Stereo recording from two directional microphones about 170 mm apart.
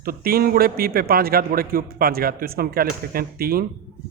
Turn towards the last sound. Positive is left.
turn(degrees=-60)  # may be behind; listen again after turning